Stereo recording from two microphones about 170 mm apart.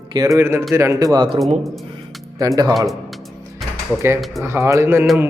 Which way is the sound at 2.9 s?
Centre (ahead or behind).